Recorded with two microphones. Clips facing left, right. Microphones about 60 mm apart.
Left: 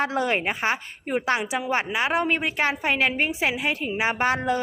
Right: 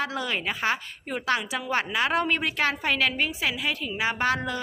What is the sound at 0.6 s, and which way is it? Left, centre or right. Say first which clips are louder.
A woman's voice: left 2 dB; left.